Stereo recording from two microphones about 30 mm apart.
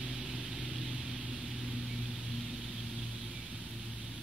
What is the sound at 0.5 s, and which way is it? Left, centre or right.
Vehicle, right.